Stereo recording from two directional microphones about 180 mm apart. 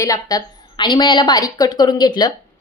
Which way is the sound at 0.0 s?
20° left (ahead or behind).